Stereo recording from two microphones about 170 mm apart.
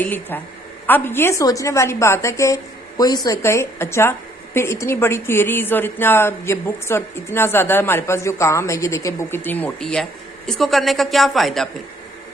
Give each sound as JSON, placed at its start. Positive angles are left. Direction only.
{"t": 0.0, "sound": "a woman's voice", "side_deg": 10}